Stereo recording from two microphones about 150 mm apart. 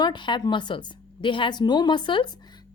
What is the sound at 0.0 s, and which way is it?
A woman's voice, 30° left (ahead or behind).